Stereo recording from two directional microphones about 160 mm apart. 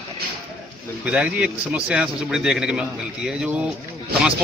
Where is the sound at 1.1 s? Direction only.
5° right (ahead or behind).